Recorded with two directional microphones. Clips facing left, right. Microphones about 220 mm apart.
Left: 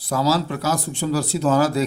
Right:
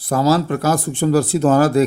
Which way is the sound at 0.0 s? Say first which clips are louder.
Right 5 dB; 50° right (ahead or behind).